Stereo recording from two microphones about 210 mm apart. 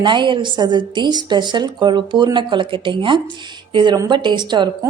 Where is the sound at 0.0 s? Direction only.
20° right (ahead or behind).